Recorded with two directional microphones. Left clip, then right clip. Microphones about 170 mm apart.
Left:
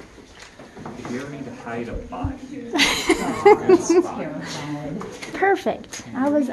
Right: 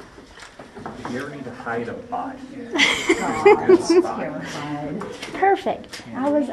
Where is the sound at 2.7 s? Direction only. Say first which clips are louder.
Right 1 dB; 20° left (ahead or behind).